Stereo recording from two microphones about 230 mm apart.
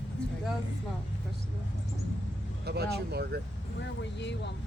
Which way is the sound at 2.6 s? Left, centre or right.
Right.